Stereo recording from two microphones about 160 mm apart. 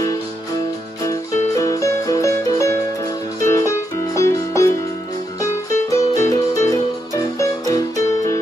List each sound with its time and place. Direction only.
1.6 s music: 20° left (ahead or behind)